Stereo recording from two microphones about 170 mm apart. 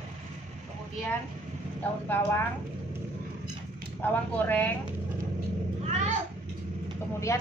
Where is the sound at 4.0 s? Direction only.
10° left (ahead or behind).